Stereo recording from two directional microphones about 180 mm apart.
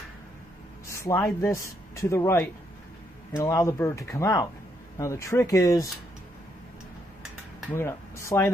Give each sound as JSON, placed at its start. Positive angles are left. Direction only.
{"t": 0.9, "sound": "speech", "side_deg": 15}
{"t": 7.7, "sound": "speech", "side_deg": 15}